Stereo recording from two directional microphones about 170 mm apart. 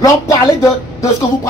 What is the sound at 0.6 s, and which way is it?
Speech, 20° left (ahead or behind).